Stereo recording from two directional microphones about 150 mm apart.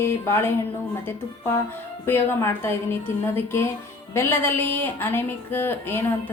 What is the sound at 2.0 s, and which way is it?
A woman's voice, 15° left (ahead or behind).